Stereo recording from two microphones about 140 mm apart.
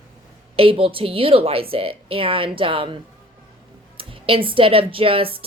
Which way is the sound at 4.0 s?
40° right (ahead or behind).